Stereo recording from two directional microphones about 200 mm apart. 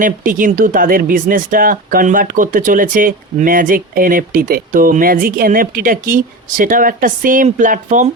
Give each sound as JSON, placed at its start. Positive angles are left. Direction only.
{"t": 0.0, "sound": "speech", "side_deg": -40}